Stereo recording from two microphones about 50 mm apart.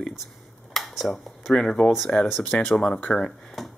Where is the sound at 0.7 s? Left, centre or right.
Centre.